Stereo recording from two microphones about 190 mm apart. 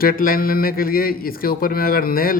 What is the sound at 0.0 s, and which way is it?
Speech, 50° left (ahead or behind).